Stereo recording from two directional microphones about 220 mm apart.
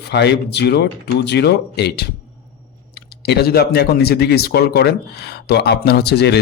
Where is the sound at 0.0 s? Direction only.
50° left (ahead or behind).